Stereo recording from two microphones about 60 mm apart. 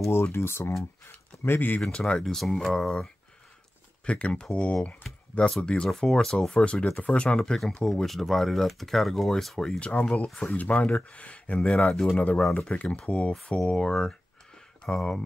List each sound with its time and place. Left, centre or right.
0.0 s speech: left
1.8 s speech: centre
2.2 s speech: centre
6.5 s speech: centre
7.3 s speech: centre
9.6 s speech: centre
11.7 s speech: centre
12.2 s speech: left